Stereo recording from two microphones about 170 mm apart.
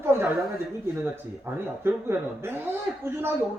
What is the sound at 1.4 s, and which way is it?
A man's voice, 15° right (ahead or behind).